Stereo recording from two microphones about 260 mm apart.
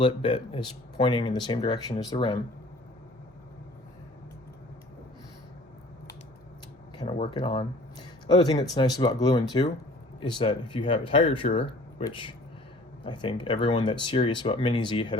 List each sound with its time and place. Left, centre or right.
0.0 s speech: centre
7.0 s speech: left